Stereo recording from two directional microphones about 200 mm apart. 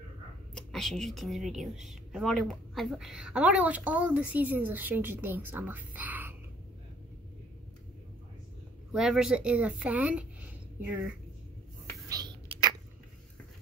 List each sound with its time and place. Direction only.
0.6 s a woman's voice: centre (ahead or behind)
8.9 s speech: 5° right (ahead or behind)
12.1 s whispering: 20° right (ahead or behind)